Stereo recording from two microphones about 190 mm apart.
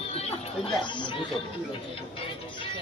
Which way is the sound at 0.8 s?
25° left (ahead or behind).